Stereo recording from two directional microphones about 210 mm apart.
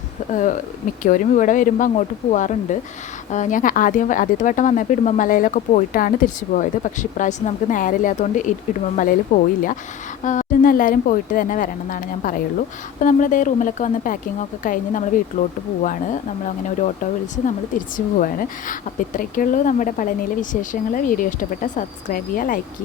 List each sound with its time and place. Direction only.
0.3 s speech: 40° left (ahead or behind)
16.6 s speech: 35° left (ahead or behind)